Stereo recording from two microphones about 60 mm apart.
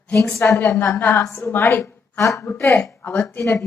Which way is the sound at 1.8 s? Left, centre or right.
Left.